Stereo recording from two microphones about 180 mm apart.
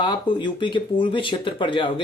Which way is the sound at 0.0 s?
25° left (ahead or behind).